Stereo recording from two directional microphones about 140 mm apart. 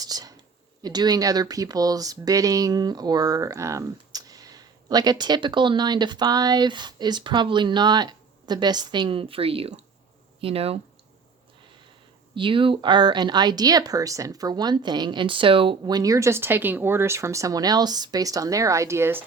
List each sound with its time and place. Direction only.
0.0 s a sound: 25° right (ahead or behind)
0.8 s speech: 30° right (ahead or behind); by 10.8 s 45° right (ahead or behind)
12.3 s speech: 35° right (ahead or behind); by 19.2 s 15° right (ahead or behind)